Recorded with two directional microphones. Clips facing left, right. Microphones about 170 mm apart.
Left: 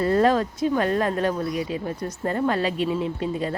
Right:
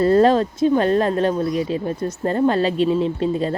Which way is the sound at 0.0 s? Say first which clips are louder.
Right 5 dB; 30° right (ahead or behind).